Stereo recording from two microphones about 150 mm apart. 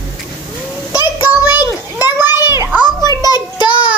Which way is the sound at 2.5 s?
20° right (ahead or behind).